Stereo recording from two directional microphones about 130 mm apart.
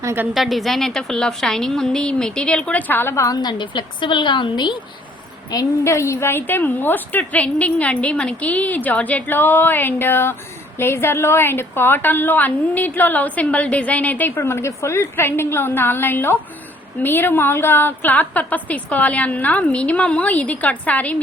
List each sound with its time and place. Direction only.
0.0 s a woman's voice: 20° right (ahead or behind)
0.3 s a woman's voice: centre (ahead or behind); by 4.8 s 35° left (ahead or behind)
5.5 s a woman's voice: 25° left (ahead or behind)